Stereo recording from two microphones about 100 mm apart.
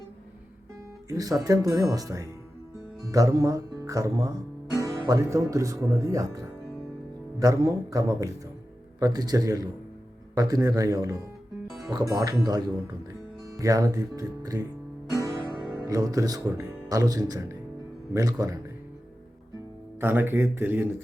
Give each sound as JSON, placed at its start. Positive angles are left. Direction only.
{"t": 1.0, "sound": "speech", "side_deg": -35}
{"t": 15.9, "sound": "speech", "side_deg": -35}
{"t": 20.0, "sound": "speech", "side_deg": -20}